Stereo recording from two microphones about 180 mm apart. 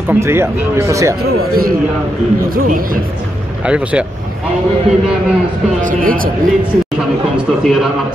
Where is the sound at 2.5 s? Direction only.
50° right (ahead or behind).